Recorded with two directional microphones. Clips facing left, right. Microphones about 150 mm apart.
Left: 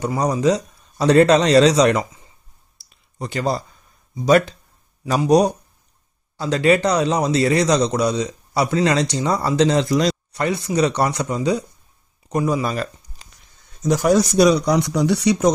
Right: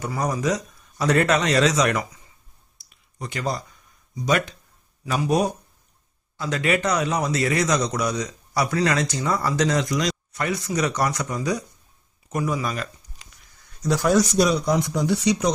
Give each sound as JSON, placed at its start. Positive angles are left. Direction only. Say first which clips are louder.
{"t": 0.0, "sound": "a man's voice", "louder": "left 6 dB", "side_deg": 30}
{"t": 3.2, "sound": "speech", "louder": "left 5 dB", "side_deg": 35}
{"t": 6.3, "sound": "a man's voice", "louder": "left 7 dB", "side_deg": 30}
{"t": 13.6, "sound": "a sound", "louder": "left 4 dB", "side_deg": 20}
{"t": 14.3, "sound": "speech", "louder": "left 5 dB", "side_deg": 70}